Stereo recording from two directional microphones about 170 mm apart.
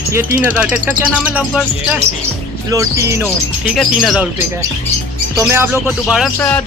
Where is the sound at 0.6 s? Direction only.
10° right (ahead or behind).